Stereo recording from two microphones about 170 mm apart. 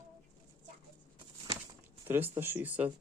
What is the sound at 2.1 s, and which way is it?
Speech, 10° right (ahead or behind).